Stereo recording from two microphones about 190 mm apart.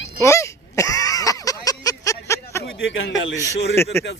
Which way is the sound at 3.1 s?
15° left (ahead or behind).